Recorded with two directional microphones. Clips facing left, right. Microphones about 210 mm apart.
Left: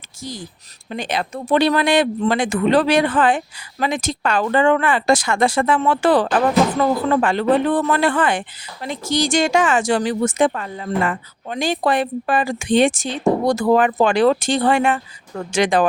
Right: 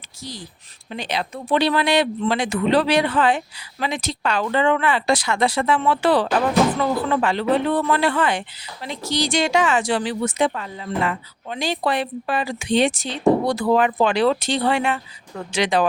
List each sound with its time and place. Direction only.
0.9 s speech: 50° left (ahead or behind)